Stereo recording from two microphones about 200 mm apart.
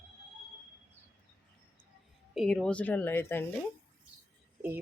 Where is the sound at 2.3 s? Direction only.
Centre (ahead or behind).